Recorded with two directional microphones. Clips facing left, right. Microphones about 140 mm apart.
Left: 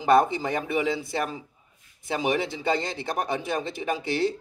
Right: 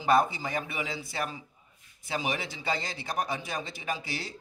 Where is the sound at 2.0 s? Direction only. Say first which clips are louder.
Left 7 dB; 55° left (ahead or behind).